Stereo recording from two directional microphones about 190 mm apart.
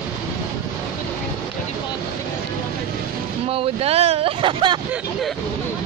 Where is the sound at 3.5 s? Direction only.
30° right (ahead or behind).